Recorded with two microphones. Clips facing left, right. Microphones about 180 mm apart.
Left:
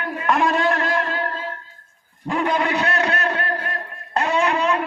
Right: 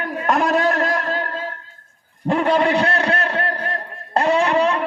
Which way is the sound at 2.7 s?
30° right (ahead or behind).